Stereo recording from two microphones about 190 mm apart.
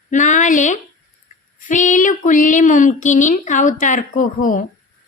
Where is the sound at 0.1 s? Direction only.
40° left (ahead or behind).